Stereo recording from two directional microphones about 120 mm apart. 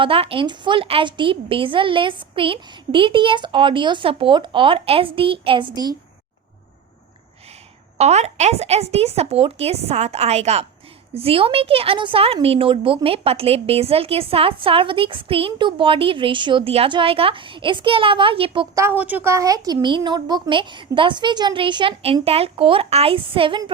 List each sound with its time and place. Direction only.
0.0 s speech: 50° right (ahead or behind)
5.7 s speech: 30° right (ahead or behind)
7.9 s a woman's voice: 65° right (ahead or behind)
11.1 s speech: 55° right (ahead or behind)
18.7 s speech: 25° right (ahead or behind)
18.9 s speech: 15° right (ahead or behind); by 21.9 s 45° right (ahead or behind)
22.0 s speech: 55° right (ahead or behind)